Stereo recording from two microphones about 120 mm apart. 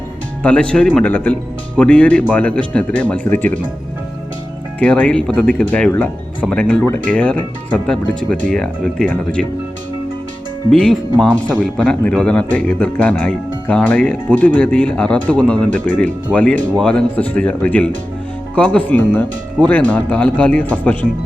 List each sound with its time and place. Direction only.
0.4 s speech: 10° left (ahead or behind)
4.8 s speech: 10° left (ahead or behind)
10.7 s speech: 5° left (ahead or behind)